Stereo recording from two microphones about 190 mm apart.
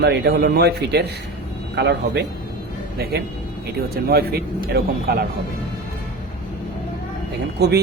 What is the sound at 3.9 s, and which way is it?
A man's voice, 55° right (ahead or behind).